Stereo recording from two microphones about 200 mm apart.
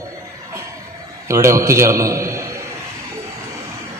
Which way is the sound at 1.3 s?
15° right (ahead or behind).